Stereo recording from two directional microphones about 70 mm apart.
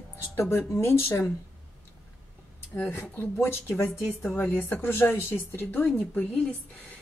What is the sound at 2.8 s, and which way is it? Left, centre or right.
A woman's voice, left.